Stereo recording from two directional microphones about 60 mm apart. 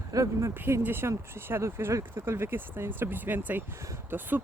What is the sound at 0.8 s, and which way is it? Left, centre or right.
Speech, right.